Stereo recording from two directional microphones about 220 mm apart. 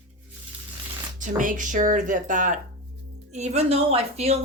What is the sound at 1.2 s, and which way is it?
A woman's voice, 35° right (ahead or behind).